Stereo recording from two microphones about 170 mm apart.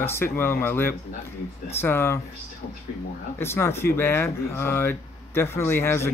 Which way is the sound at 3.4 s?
15° left (ahead or behind).